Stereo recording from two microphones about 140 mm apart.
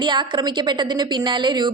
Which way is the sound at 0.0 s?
35° right (ahead or behind).